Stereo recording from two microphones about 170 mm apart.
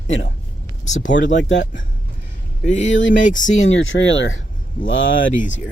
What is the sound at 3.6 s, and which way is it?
Speech, 90° left.